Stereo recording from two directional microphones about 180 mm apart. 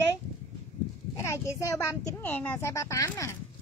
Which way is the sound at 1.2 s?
15° left (ahead or behind).